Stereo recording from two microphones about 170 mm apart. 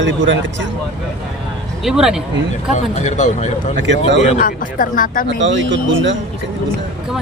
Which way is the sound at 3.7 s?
90° right.